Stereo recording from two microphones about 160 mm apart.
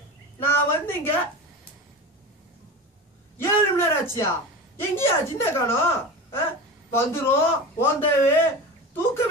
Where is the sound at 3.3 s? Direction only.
15° left (ahead or behind).